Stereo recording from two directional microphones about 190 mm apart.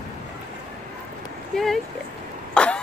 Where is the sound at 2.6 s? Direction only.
5° left (ahead or behind).